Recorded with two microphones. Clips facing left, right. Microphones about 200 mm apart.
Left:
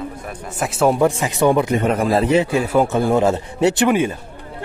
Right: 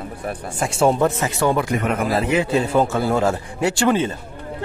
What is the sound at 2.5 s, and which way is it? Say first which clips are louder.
Speech: even; 25° right (ahead or behind).